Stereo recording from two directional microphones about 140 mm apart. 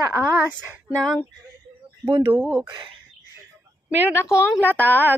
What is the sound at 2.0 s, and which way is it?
Speech, 20° right (ahead or behind).